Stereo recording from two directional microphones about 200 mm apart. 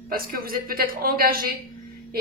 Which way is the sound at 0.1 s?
45° right (ahead or behind).